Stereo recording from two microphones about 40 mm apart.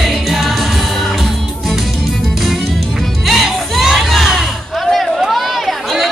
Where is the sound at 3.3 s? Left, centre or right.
Centre.